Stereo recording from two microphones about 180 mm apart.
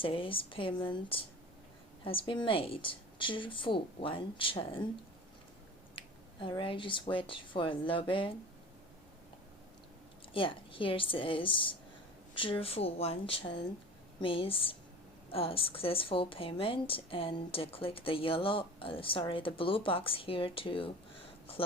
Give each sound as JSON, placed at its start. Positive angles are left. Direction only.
{"t": 0.0, "sound": "a woman's voice", "side_deg": 30}
{"t": 6.0, "sound": "a woman's voice", "side_deg": 30}
{"t": 10.3, "sound": "a woman's voice", "side_deg": 30}